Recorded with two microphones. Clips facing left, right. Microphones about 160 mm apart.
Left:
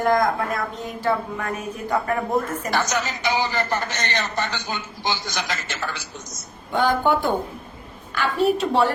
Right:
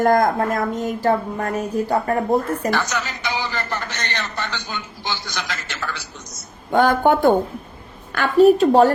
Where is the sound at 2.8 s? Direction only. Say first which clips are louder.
Left 1 dB; 45° left (ahead or behind).